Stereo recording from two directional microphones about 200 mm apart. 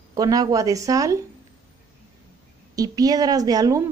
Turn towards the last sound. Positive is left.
turn(degrees=-20)  # may be behind; listen again after turning